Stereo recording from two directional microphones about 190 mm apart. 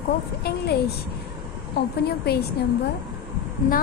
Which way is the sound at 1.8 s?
60° left (ahead or behind).